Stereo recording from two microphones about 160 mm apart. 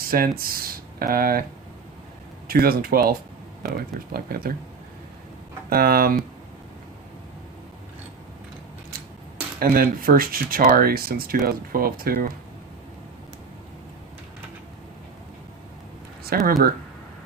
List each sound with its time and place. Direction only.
0.0 s speech: 65° right (ahead or behind)
2.5 s speech: 70° right (ahead or behind)
5.6 s speech: 70° right (ahead or behind)
9.6 s speech: 65° right (ahead or behind)
16.3 s speech: 65° right (ahead or behind)